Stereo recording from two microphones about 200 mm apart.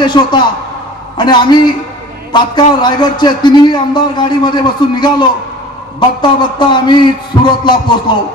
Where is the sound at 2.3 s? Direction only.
20° left (ahead or behind).